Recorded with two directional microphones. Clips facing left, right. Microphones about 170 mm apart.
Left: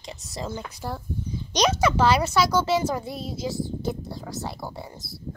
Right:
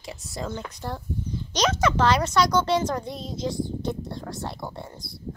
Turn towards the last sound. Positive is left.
turn(degrees=5)  # may be behind; listen again after turning